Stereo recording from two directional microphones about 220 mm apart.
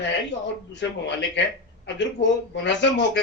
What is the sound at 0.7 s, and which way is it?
Speech, 55° left (ahead or behind).